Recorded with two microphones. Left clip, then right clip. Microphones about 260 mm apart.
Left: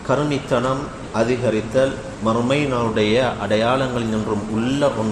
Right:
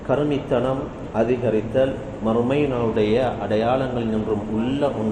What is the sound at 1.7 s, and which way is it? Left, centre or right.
A man's voice, left.